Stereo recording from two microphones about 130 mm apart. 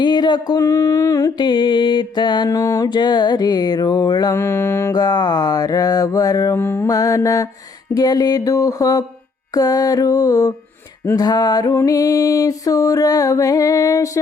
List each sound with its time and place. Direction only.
0.0 s a sound: 35° left (ahead or behind)
4.4 s music: 20° left (ahead or behind)
4.9 s music: 30° left (ahead or behind)